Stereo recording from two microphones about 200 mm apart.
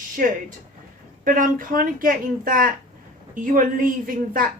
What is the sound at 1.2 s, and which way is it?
Speech, 40° right (ahead or behind).